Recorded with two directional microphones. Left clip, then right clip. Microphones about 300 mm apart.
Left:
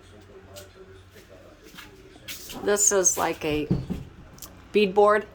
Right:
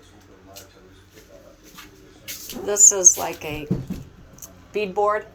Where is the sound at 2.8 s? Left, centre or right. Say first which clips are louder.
Right 5 dB; left.